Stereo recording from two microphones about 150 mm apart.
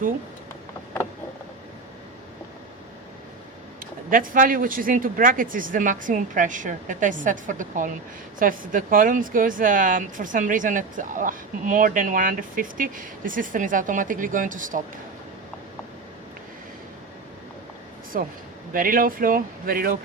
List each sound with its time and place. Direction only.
4.1 s speech: 65° right (ahead or behind)
18.1 s speech: 70° right (ahead or behind)